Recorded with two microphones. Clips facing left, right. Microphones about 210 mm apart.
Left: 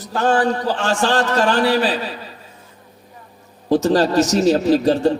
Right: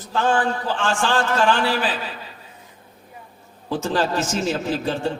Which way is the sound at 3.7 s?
40° left (ahead or behind).